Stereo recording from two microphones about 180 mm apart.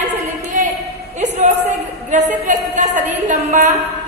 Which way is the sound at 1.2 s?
40° right (ahead or behind).